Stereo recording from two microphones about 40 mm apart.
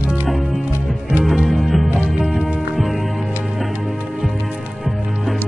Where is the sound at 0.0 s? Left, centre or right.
Right.